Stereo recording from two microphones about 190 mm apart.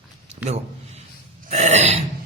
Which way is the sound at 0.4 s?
35° right (ahead or behind).